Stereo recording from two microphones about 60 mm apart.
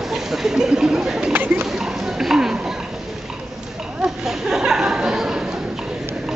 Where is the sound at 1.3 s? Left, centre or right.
Right.